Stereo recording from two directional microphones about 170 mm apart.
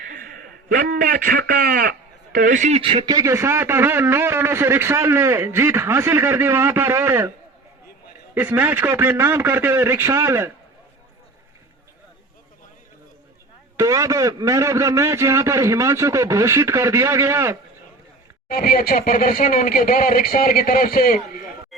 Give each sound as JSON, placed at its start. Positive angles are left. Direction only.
{"t": 0.1, "sound": "a man's voice", "side_deg": -55}
{"t": 2.8, "sound": "a man's voice", "side_deg": -30}
{"t": 8.4, "sound": "a man's voice", "side_deg": -10}
{"t": 13.7, "sound": "a man's voice", "side_deg": -20}
{"t": 18.4, "sound": "speech", "side_deg": 60}
{"t": 21.7, "sound": "a sound", "side_deg": 0}